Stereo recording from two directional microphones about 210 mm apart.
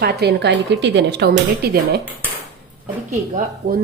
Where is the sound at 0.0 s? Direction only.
50° right (ahead or behind).